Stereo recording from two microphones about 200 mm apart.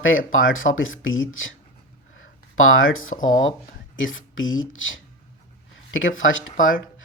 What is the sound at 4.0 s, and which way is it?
Speech, 80° left.